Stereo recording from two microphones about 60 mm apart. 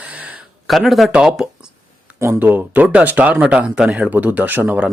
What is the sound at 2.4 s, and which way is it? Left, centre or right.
Speech, right.